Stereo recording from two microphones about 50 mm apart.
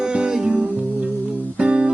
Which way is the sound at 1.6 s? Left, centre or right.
Right.